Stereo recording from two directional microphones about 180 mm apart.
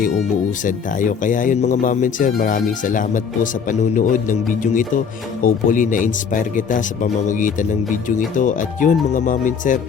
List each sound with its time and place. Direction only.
0.6 s speech: 45° left (ahead or behind)